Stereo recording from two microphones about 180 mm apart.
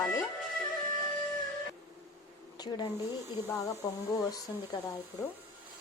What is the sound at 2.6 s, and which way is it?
Speech, 25° left (ahead or behind).